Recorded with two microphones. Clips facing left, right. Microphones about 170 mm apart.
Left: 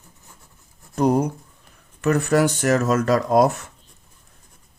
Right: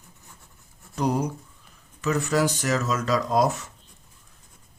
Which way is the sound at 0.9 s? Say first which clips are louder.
Left 6 dB; 55° left (ahead or behind).